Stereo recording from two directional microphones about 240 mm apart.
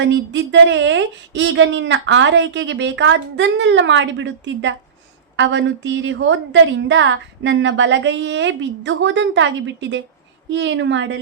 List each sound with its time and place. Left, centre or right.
0.0 s a woman's voice: right